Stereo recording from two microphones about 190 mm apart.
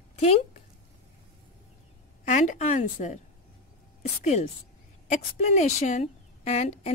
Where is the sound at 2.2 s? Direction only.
40° left (ahead or behind).